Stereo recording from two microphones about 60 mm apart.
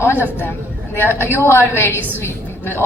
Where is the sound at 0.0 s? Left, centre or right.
Left.